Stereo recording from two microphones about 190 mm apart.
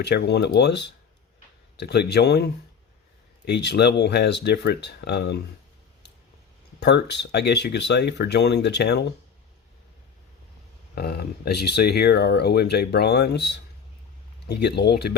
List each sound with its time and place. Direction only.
0.0 s speech: 60° left (ahead or behind)
6.7 s speech: 60° left (ahead or behind)
10.9 s speech: 55° left (ahead or behind)